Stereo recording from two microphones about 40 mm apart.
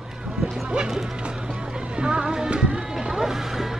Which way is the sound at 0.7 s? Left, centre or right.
Right.